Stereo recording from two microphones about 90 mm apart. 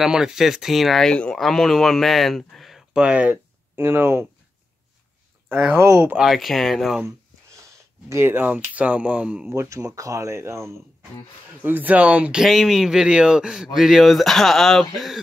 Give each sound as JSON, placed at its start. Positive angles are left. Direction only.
{"t": 0.0, "sound": "speech", "side_deg": -5}
{"t": 1.1, "sound": "speech", "side_deg": 15}
{"t": 5.8, "sound": "speech", "side_deg": -30}
{"t": 6.1, "sound": "speech", "side_deg": 0}
{"t": 8.1, "sound": "speech", "side_deg": -25}
{"t": 9.5, "sound": "speech", "side_deg": -35}
{"t": 11.6, "sound": "speech", "side_deg": -20}
{"t": 12.4, "sound": "speech", "side_deg": -5}